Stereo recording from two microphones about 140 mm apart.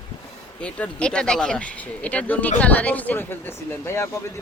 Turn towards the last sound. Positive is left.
turn(degrees=20)  # may be behind; listen again after turning